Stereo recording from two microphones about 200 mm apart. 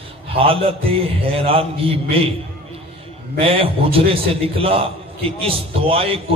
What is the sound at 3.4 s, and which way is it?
A man's voice, 30° right (ahead or behind).